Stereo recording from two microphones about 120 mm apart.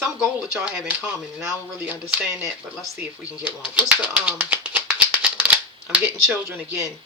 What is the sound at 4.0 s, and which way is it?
Shuffling cards, 10° right (ahead or behind).